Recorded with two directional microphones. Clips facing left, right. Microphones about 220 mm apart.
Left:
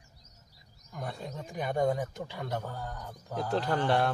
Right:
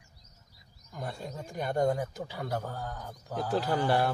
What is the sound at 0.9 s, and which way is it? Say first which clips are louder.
Speech: even; centre (ahead or behind).